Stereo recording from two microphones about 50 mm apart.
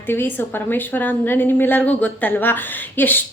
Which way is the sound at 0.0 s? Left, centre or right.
Left.